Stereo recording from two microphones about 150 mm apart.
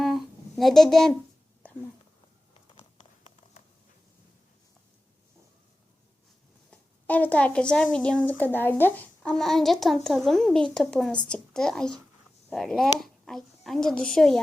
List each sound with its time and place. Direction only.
0.0 s a sound: centre (ahead or behind)
2.7 s clip-clop: 50° left (ahead or behind)
6.7 s a child's voice: 10° left (ahead or behind)